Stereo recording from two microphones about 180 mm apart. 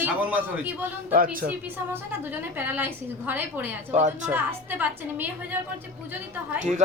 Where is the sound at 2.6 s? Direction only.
10° right (ahead or behind).